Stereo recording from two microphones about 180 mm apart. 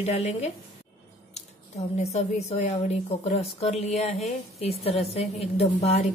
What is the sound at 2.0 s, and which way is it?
A woman's voice, 35° left (ahead or behind).